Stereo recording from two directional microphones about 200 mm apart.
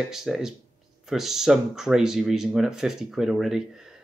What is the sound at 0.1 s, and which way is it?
Speech, centre (ahead or behind).